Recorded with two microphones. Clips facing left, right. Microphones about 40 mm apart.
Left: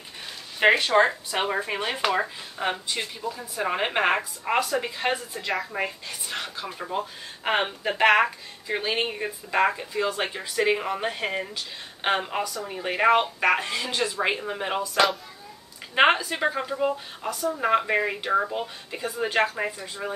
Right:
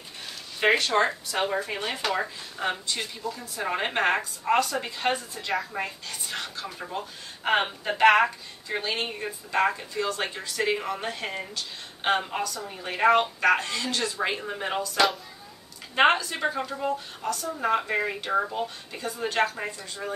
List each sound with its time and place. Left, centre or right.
0.6 s speech: left; by 5.7 s centre
6.3 s speech: centre